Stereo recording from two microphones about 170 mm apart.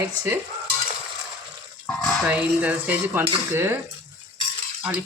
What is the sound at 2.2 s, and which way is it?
Speech, 10° right (ahead or behind).